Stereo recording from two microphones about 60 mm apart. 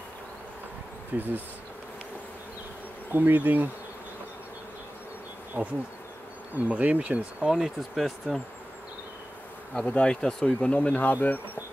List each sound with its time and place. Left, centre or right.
1.1 s bee: right
3.1 s bee: right
5.6 s bee: right
7.4 s speech: centre
9.8 s speech: centre